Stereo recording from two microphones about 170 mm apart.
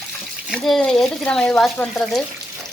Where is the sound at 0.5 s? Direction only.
Centre (ahead or behind).